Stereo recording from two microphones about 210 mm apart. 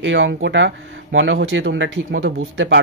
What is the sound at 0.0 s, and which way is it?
Speech, 65° right (ahead or behind).